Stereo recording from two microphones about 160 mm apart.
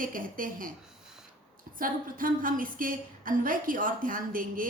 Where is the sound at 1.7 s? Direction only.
60° right (ahead or behind).